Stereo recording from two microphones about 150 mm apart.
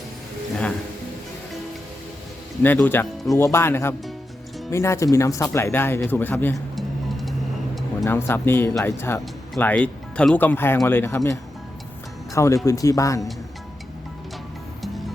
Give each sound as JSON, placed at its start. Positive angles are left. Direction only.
{"t": 2.7, "sound": "speech", "side_deg": 10}
{"t": 6.7, "sound": "music", "side_deg": 0}
{"t": 8.0, "sound": "speech", "side_deg": 15}